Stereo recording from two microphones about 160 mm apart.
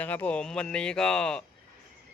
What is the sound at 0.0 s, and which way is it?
Speech, 10° left (ahead or behind).